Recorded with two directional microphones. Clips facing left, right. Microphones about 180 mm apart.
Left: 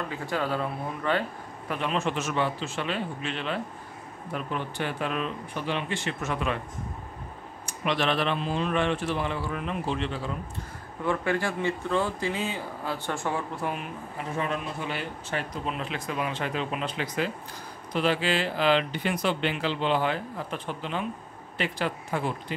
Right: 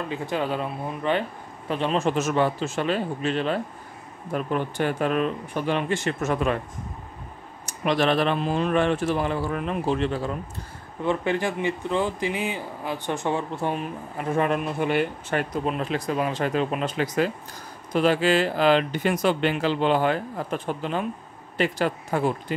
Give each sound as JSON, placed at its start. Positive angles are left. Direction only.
{"t": 0.1, "sound": "speech", "side_deg": -20}
{"t": 1.7, "sound": "speech", "side_deg": -35}
{"t": 7.6, "sound": "speech", "side_deg": -40}
{"t": 11.1, "sound": "speech", "side_deg": -20}
{"t": 14.3, "sound": "speech", "side_deg": -60}